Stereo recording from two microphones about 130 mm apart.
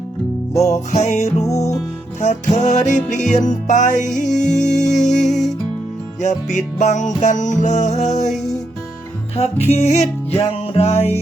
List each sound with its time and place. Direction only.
0.5 s music: 25° left (ahead or behind)
0.9 s music: 65° left (ahead or behind)
2.6 s music: 65° left (ahead or behind)
9.3 s music: 55° left (ahead or behind)